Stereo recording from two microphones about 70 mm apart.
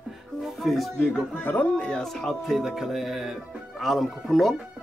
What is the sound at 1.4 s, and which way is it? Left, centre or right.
Speech, left.